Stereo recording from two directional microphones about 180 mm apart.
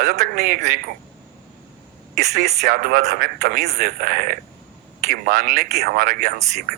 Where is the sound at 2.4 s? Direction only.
55° right (ahead or behind).